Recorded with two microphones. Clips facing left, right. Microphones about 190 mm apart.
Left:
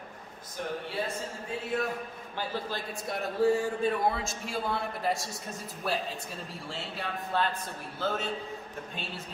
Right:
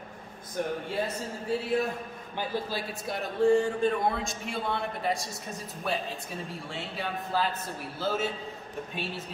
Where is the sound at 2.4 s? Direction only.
10° right (ahead or behind).